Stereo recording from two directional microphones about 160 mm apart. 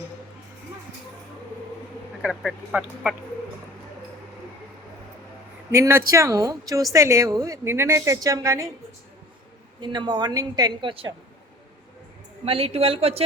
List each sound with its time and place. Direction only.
2.2 s speech: centre (ahead or behind)
5.7 s a woman's voice: 20° right (ahead or behind)
9.8 s a woman's voice: 30° right (ahead or behind)
12.5 s a woman's voice: 35° right (ahead or behind)